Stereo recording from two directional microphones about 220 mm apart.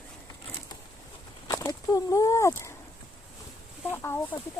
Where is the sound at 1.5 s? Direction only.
15° left (ahead or behind).